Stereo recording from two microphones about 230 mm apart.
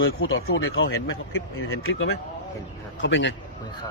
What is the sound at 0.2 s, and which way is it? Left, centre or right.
Speech, left.